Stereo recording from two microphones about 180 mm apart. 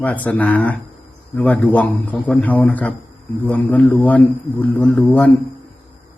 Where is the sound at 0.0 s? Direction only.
10° left (ahead or behind).